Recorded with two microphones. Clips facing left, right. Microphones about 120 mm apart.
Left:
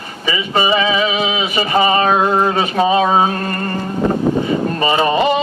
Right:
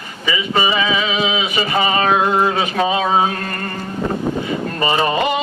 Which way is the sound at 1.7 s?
30° left (ahead or behind).